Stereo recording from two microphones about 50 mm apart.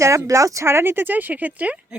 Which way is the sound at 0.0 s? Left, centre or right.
Right.